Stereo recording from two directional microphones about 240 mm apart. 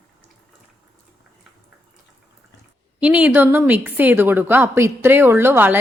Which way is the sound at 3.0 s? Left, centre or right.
Centre.